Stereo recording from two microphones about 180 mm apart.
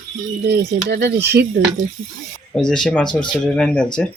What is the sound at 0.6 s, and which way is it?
Speech, 70° right (ahead or behind).